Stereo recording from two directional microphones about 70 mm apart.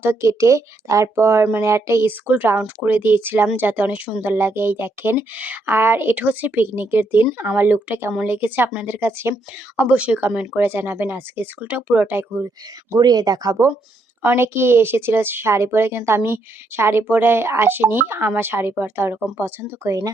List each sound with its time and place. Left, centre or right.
0.0 s speech: right
2.0 s speech: right
4.2 s speech: right
9.7 s speech: right
13.0 s speech: right
14.2 s speech: right
19.8 s speech: right